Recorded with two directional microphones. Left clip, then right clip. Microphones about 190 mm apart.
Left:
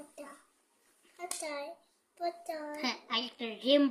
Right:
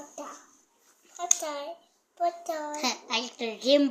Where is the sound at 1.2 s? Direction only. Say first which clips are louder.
Right 9 dB; 25° left (ahead or behind).